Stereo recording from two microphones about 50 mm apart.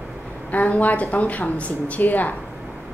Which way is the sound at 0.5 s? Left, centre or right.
Left.